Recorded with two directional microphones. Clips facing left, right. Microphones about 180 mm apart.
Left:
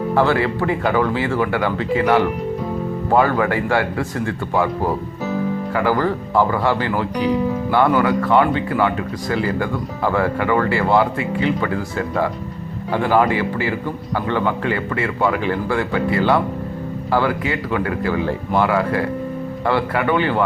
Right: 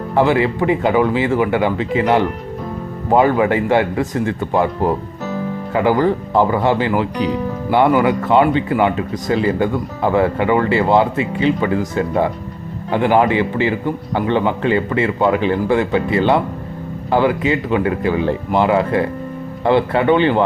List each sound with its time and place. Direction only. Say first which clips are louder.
0.1 s speech: right 3 dB; 15° right (ahead or behind)
5.7 s speech: right 5 dB; 20° right (ahead or behind)